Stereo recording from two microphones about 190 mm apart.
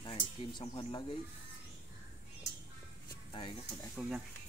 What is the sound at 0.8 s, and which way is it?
Speech, 20° left (ahead or behind).